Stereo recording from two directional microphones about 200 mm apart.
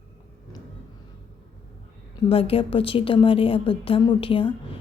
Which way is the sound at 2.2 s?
30° left (ahead or behind).